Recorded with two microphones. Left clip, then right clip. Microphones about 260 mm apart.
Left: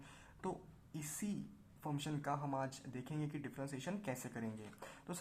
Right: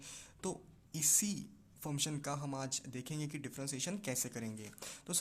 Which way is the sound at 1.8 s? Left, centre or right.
Right.